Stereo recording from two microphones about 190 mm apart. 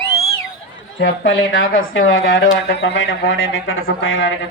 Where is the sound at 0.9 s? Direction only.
85° left.